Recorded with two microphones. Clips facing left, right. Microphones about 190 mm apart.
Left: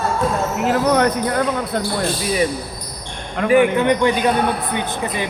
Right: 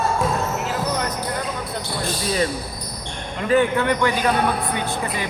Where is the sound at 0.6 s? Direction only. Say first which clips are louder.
Left 8 dB; 65° left (ahead or behind).